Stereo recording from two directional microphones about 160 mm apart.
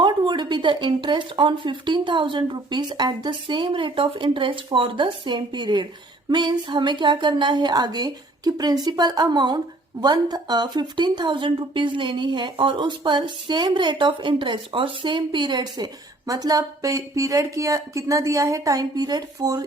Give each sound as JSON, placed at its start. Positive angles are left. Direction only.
{"t": 0.0, "sound": "a woman's voice", "side_deg": -30}